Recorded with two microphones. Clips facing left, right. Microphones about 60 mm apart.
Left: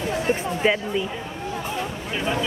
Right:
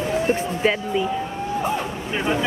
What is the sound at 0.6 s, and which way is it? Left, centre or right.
Speech, centre.